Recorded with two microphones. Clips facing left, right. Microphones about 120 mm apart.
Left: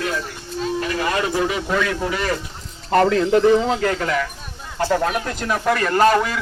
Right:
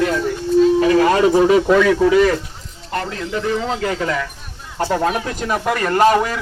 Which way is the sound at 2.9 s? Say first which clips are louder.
Left 9 dB; 65° left (ahead or behind).